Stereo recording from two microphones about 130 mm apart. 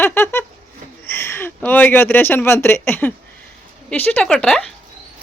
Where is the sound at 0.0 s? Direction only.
15° left (ahead or behind).